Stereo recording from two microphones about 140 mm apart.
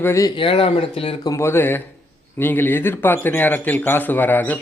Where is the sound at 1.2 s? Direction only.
20° left (ahead or behind).